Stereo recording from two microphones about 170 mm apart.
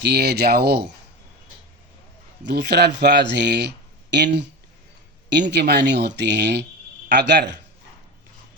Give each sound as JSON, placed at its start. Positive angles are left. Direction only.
{"t": 0.0, "sound": "speech", "side_deg": -75}
{"t": 2.4, "sound": "speech", "side_deg": -90}